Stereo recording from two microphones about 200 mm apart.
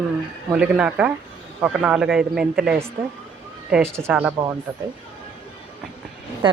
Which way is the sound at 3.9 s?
10° right (ahead or behind).